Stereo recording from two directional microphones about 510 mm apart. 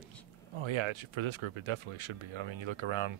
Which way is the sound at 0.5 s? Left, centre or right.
Right.